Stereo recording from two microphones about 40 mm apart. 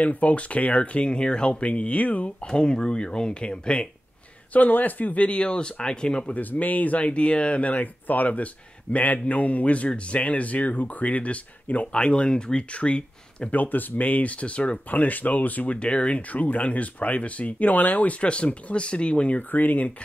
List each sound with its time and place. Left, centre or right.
0.0 s speech: left
2.4 s speech: left
4.5 s speech: left
6.3 s speech: left
7.1 s speech: left
11.9 s speech: left
13.6 s speech: left
14.9 s speech: left
18.2 s speech: left
19.5 s speech: left